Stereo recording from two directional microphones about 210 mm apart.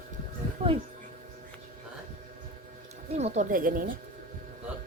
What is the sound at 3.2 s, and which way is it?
Speech, 30° right (ahead or behind).